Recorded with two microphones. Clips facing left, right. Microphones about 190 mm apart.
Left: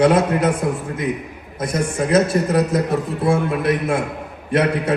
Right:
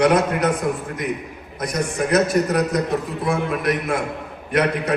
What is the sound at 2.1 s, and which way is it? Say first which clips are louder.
Speech: left 2 dB; 30° left (ahead or behind).